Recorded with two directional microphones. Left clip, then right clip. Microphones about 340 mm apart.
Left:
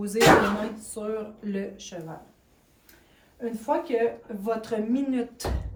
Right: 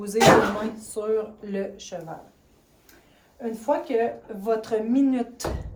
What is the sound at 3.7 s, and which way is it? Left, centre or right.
Speech, centre.